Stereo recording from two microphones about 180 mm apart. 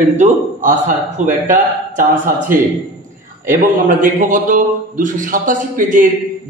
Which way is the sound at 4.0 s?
50° right (ahead or behind).